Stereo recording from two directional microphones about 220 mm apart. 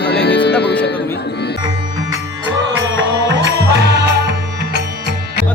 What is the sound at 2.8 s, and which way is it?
Music, 55° right (ahead or behind).